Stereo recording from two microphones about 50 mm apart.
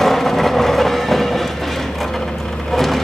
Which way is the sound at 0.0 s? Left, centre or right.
Centre.